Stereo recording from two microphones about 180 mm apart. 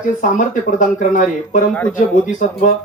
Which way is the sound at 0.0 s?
45° left (ahead or behind).